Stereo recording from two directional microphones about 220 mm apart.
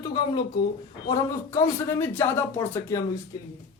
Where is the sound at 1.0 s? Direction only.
15° left (ahead or behind).